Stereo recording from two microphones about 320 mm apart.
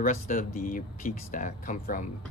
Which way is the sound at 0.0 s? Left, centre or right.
Left.